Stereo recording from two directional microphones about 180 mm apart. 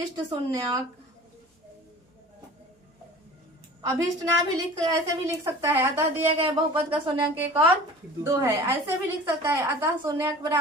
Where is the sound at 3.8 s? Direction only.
20° right (ahead or behind).